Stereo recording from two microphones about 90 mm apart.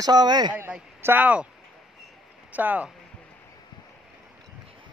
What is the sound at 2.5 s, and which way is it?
Speech, 20° right (ahead or behind).